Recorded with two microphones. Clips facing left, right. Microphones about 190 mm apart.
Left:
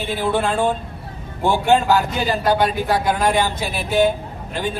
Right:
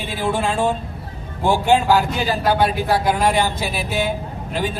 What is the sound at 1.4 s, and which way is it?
Speech, 10° right (ahead or behind).